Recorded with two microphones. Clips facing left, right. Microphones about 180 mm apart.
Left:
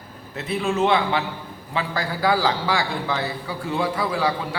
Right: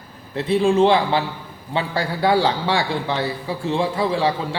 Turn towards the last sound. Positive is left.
turn(degrees=-25)  # may be behind; listen again after turning